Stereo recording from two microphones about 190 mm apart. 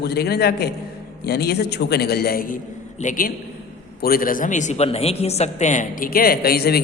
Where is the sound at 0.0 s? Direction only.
60° left (ahead or behind).